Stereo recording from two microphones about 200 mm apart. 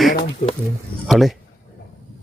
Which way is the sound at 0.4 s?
40° left (ahead or behind).